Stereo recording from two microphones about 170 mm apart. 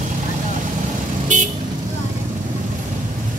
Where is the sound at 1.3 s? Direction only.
50° right (ahead or behind).